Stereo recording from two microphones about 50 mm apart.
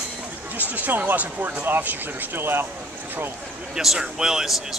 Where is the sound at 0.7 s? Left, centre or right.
Right.